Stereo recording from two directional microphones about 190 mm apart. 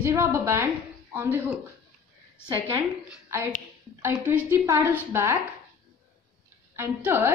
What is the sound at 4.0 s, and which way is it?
A woman's voice, 10° right (ahead or behind).